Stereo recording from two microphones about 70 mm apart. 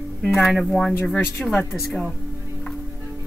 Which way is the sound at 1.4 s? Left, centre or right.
Left.